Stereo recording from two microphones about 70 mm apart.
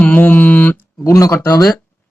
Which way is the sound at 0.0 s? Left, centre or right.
Left.